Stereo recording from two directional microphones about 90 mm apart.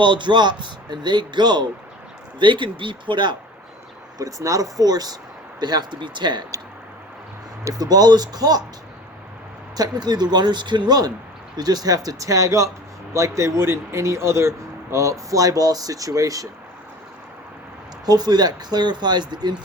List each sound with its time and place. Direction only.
0.0 s speech: 60° right (ahead or behind)
4.2 s speech: 40° right (ahead or behind); by 6.4 s 55° right (ahead or behind)
7.6 s speech: 45° right (ahead or behind)
9.7 s a man's voice: 50° right (ahead or behind)
18.0 s speech: 50° right (ahead or behind)